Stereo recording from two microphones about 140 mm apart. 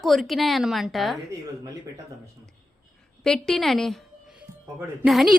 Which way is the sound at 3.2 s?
5° left (ahead or behind).